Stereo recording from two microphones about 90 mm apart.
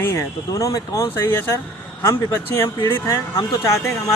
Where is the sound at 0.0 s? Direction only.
30° left (ahead or behind).